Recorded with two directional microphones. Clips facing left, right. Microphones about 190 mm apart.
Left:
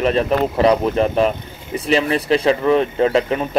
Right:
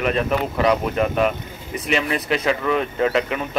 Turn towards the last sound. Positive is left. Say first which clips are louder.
# left 4 dB
turn(degrees=30)  # may be behind; listen again after turning